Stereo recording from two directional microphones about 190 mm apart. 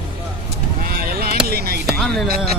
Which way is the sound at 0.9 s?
55° right (ahead or behind).